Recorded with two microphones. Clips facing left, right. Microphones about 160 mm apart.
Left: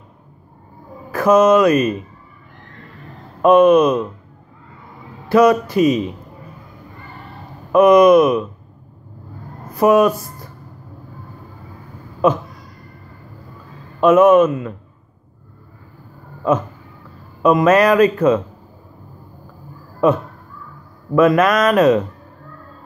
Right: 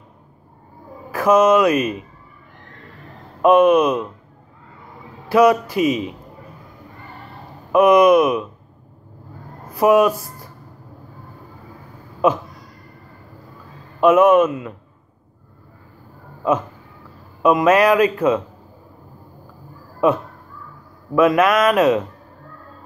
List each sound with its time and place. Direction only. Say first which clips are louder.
1.1 s speech: left 2 dB; 10° right (ahead or behind)
3.4 s speech: left 2 dB; 10° right (ahead or behind)
5.3 s speech: left 2 dB; 5° right (ahead or behind)
7.7 s speech: left 3 dB; 10° right (ahead or behind)
9.8 s speech: left 1 dB; 10° right (ahead or behind)
14.0 s speech: left 2 dB; 10° right (ahead or behind)
16.4 s speech: left 2 dB; 10° right (ahead or behind)
21.1 s speech: left 2 dB; 10° right (ahead or behind)